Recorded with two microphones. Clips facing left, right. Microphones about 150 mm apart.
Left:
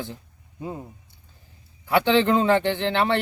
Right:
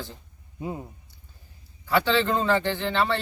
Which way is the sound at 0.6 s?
15° right (ahead or behind).